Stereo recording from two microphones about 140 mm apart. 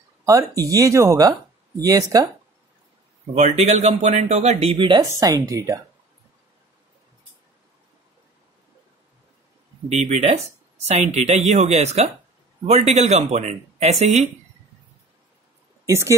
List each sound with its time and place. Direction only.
0.2 s speech: 25° right (ahead or behind)
3.3 s speech: 55° right (ahead or behind); by 5.0 s 35° right (ahead or behind)
5.1 s speech: 25° right (ahead or behind)
9.8 s speech: 50° right (ahead or behind)
15.9 s speech: 20° right (ahead or behind)